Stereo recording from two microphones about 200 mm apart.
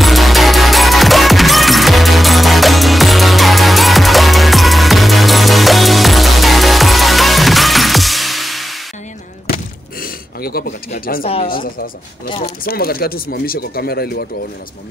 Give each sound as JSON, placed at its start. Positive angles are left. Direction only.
{"t": 0.0, "sound": "music", "side_deg": 0}
{"t": 10.0, "sound": "a sound", "side_deg": 50}
{"t": 11.4, "sound": "speech", "side_deg": 45}
{"t": 12.3, "sound": "speech", "side_deg": 30}
{"t": 12.6, "sound": "speech", "side_deg": 50}